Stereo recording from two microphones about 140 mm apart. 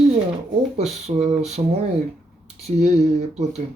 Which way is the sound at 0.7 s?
50° right (ahead or behind).